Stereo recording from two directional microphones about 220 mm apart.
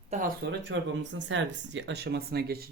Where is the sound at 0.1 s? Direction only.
30° right (ahead or behind).